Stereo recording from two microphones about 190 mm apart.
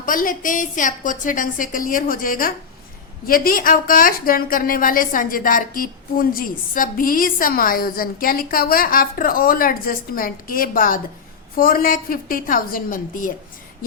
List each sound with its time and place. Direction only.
0.0 s a woman's voice: 45° left (ahead or behind)